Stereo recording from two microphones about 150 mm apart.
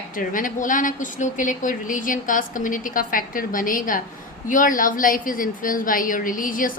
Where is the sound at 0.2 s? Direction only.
60° left (ahead or behind).